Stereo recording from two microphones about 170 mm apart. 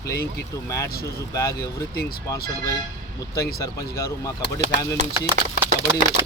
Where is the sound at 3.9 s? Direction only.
20° left (ahead or behind).